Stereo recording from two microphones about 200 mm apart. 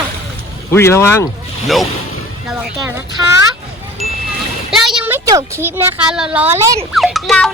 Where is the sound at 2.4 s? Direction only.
5° right (ahead or behind).